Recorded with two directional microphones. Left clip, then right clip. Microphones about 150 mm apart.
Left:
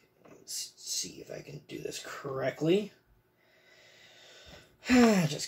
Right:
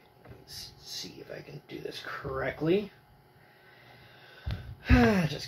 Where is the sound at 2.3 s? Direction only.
25° left (ahead or behind).